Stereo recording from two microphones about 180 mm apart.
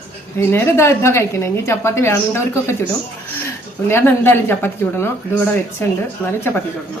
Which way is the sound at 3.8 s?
10° left (ahead or behind).